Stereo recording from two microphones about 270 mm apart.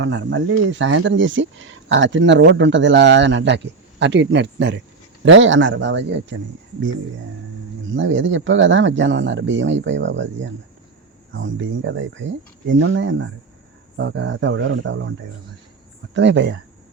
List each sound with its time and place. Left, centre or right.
0.0 s speech: right
7.9 s speech: right
16.1 s speech: right